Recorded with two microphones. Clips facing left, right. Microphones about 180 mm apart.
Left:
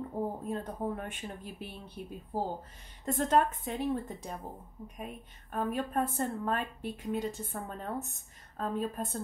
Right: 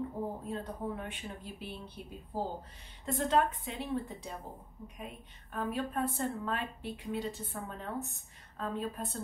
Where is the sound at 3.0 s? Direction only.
45° left (ahead or behind).